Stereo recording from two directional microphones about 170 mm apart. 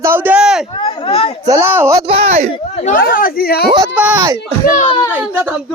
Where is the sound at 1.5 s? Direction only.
15° right (ahead or behind).